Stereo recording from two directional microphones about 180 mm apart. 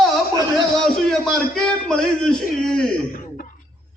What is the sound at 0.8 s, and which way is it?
A man's voice, 5° left (ahead or behind).